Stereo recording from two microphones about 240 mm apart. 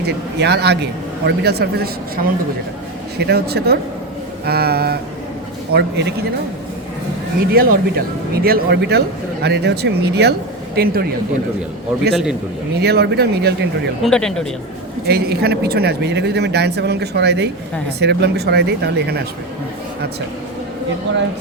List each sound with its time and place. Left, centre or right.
0.0 s speech: right
7.5 s speech: right
12.1 s speech: centre
12.8 s speech: right
14.0 s speech: centre
15.0 s speech: right